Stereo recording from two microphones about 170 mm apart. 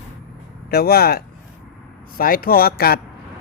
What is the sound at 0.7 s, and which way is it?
Speech, 65° left (ahead or behind).